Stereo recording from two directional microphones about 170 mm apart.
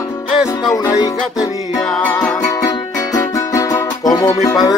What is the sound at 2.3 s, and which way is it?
Music, 20° left (ahead or behind).